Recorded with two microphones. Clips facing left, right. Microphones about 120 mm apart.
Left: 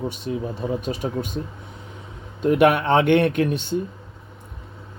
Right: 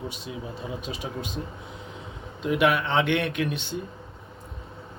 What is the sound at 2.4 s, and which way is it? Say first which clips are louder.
Speech: left 6 dB; 50° left (ahead or behind).